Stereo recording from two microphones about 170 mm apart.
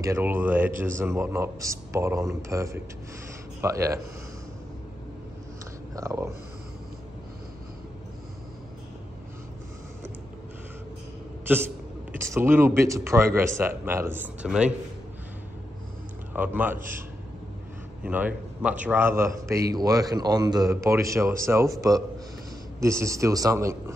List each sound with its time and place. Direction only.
0.0 s a man's voice: 15° right (ahead or behind)
5.9 s a man's voice: 15° right (ahead or behind)
12.4 s a man's voice: 15° right (ahead or behind)
16.3 s a man's voice: 10° right (ahead or behind)
18.0 s a man's voice: 10° right (ahead or behind)
22.8 s a man's voice: 15° right (ahead or behind)